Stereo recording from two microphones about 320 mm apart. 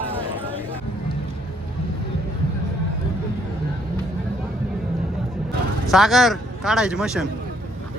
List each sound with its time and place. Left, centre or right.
5.9 s speech: centre